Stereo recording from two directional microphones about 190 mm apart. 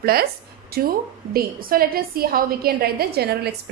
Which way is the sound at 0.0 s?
55° right (ahead or behind).